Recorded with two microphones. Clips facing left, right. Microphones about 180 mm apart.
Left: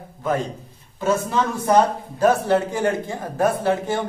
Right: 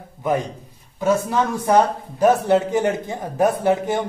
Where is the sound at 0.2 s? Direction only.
15° right (ahead or behind).